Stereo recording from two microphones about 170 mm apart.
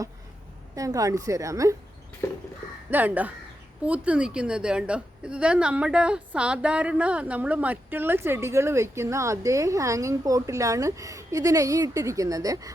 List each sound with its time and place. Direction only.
0.8 s a woman's voice: 20° right (ahead or behind)
2.9 s a woman's voice: 10° right (ahead or behind)